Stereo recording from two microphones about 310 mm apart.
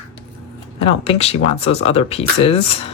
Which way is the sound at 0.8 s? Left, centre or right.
Centre.